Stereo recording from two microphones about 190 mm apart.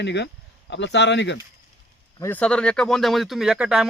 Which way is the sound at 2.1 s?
10° left (ahead or behind).